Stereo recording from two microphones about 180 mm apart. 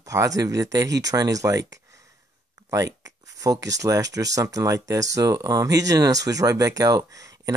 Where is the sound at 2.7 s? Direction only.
20° right (ahead or behind).